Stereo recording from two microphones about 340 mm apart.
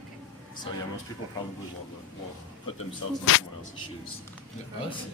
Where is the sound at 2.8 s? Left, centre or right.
Left.